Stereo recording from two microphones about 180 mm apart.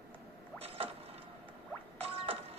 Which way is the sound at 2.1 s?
35° right (ahead or behind).